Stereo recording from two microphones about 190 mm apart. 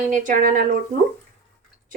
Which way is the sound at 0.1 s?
45° right (ahead or behind).